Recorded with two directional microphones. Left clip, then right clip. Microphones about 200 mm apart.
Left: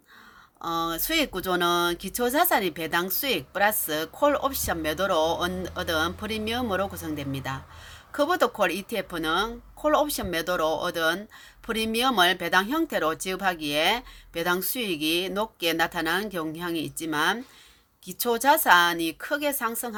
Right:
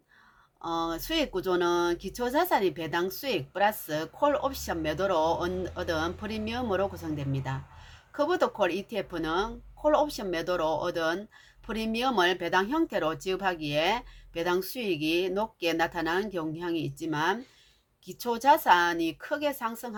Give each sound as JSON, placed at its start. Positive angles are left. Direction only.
{"t": 0.6, "sound": "speech", "side_deg": 25}